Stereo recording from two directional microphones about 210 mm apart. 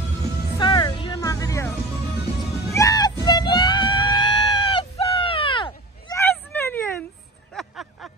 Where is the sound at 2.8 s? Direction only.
20° left (ahead or behind).